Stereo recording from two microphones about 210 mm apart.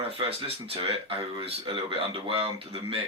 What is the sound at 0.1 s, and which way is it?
Speech, 25° right (ahead or behind).